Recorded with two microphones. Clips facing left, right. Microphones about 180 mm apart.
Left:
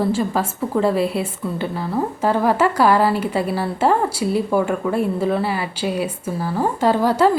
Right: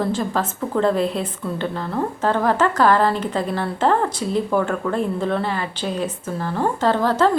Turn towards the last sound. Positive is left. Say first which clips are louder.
# left 2 dB
turn(degrees=10)  # may be behind; listen again after turning